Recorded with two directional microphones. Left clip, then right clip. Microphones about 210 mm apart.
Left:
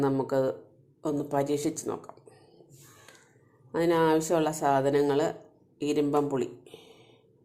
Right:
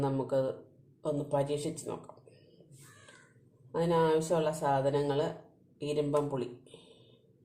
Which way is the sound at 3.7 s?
35° left (ahead or behind).